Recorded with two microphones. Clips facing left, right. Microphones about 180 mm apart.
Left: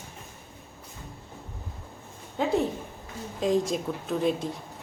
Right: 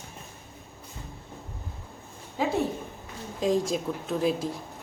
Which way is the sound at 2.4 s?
Centre (ahead or behind).